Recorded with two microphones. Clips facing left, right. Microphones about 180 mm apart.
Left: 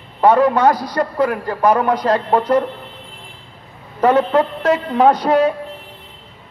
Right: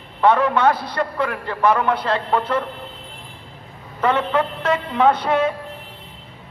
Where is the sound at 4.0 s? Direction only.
40° left (ahead or behind).